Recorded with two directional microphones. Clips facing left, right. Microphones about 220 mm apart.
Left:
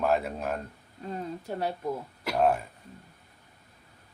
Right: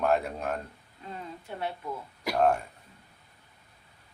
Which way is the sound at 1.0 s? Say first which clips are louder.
Left 6 dB; 40° left (ahead or behind).